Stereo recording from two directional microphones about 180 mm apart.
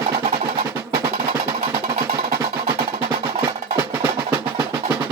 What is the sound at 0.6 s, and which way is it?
Music, 15° right (ahead or behind).